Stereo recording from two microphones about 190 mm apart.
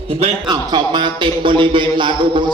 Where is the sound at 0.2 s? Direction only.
20° right (ahead or behind).